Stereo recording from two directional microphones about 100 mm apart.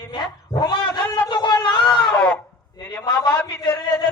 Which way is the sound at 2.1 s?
10° left (ahead or behind).